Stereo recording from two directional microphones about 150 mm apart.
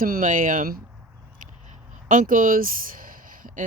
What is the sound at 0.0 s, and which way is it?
Speech, 65° right (ahead or behind).